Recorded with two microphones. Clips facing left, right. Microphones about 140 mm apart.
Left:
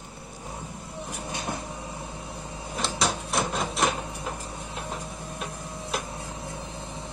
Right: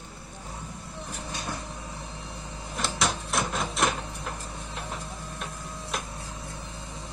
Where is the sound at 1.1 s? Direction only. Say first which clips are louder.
Left 3 dB; 20° left (ahead or behind).